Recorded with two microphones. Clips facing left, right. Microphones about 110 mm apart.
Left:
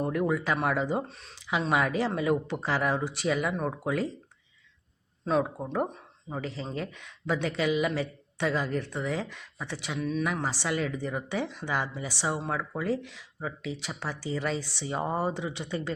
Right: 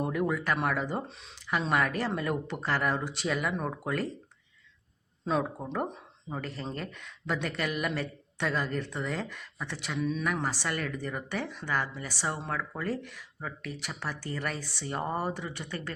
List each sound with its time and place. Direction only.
0.0 s speech: centre (ahead or behind)
1.0 s speech: centre (ahead or behind)
1.6 s speech: 10° left (ahead or behind)
5.2 s speech: centre (ahead or behind); by 15.9 s 20° left (ahead or behind)